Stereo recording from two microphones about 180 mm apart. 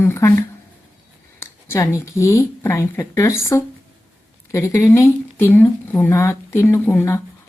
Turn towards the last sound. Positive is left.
turn(degrees=15)  # may be behind; listen again after turning